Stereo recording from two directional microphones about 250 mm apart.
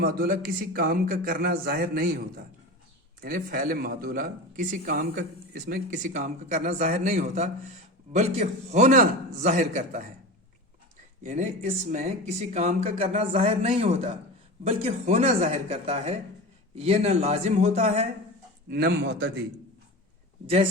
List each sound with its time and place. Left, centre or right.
0.0 s a man's voice: right
3.2 s a man's voice: right
11.2 s speech: right
18.7 s a man's voice: right